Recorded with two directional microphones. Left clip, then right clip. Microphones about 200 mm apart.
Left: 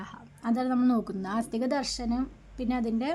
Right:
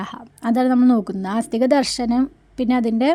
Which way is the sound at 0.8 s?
35° right (ahead or behind).